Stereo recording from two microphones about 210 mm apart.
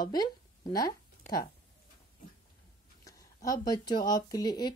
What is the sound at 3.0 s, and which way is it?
Speech, 15° left (ahead or behind).